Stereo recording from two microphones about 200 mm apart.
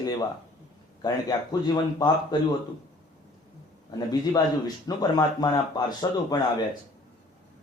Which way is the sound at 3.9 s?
20° left (ahead or behind).